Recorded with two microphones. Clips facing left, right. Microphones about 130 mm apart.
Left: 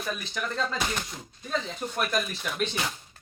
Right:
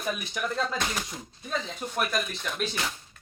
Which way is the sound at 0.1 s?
10° right (ahead or behind).